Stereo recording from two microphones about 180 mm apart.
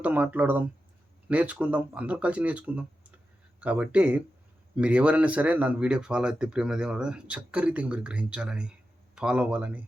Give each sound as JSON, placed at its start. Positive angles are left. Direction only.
{"t": 0.0, "sound": "speech", "side_deg": -10}